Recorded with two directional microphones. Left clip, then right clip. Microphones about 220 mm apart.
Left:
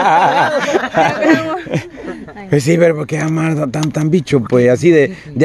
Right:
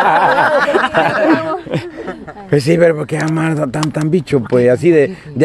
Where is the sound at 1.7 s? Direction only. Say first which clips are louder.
Right 1 dB; 10° left (ahead or behind).